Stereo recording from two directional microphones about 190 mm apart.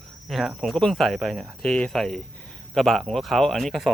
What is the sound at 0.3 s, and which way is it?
Speech, centre (ahead or behind).